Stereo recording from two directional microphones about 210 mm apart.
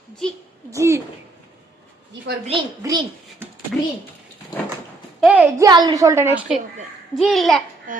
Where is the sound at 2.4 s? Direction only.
20° right (ahead or behind).